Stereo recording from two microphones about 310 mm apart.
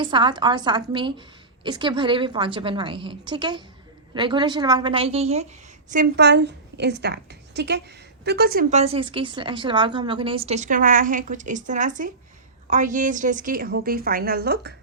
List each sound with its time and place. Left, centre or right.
0.0 s a woman's voice: centre; by 14.7 s right